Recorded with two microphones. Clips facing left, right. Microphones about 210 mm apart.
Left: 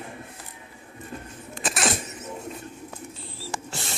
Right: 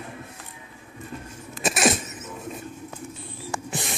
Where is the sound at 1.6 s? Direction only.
20° right (ahead or behind).